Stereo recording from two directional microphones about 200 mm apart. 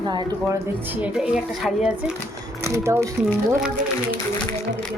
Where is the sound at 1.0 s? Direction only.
5° right (ahead or behind).